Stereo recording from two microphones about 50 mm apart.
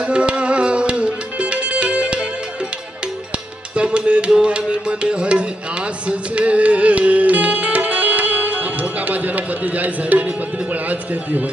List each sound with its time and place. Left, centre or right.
0.0 s music: right
3.8 s music: right
10.7 s a man's voice: right